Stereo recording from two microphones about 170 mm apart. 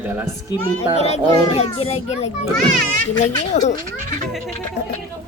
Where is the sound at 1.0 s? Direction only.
40° left (ahead or behind).